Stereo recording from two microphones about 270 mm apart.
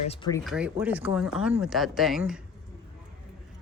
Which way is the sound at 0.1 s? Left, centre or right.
Centre.